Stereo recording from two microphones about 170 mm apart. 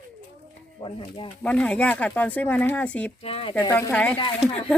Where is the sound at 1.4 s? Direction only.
5° left (ahead or behind).